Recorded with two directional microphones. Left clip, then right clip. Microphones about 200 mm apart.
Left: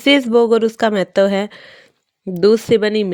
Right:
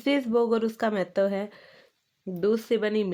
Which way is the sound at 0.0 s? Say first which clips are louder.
Left 12 dB; 35° left (ahead or behind).